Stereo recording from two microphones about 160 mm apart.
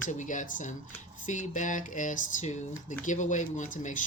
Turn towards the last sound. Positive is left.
turn(degrees=55)  # may be behind; listen again after turning